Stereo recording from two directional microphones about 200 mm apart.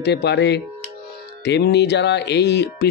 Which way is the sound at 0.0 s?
55° left (ahead or behind).